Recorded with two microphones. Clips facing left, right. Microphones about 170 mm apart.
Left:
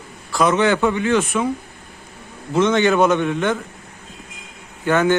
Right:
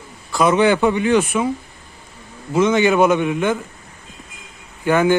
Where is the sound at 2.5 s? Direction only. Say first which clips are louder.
Right 1 dB; 5° right (ahead or behind).